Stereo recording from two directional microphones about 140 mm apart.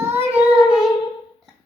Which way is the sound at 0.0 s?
15° right (ahead or behind).